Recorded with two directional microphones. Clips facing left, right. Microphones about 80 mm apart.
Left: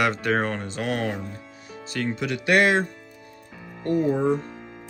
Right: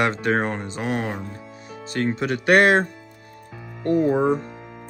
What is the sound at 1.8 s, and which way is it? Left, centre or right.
Speech, right.